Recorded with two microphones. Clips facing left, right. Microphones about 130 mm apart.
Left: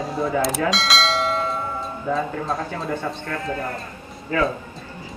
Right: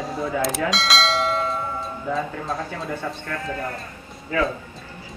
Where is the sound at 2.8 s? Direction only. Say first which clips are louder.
Left 2 dB; 30° left (ahead or behind).